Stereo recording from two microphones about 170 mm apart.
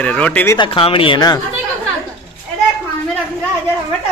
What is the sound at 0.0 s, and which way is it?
Speech, 10° left (ahead or behind).